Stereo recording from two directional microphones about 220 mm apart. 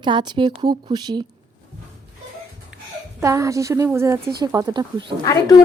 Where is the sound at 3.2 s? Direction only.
15° right (ahead or behind).